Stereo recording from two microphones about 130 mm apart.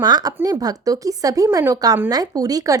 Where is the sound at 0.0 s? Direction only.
30° right (ahead or behind).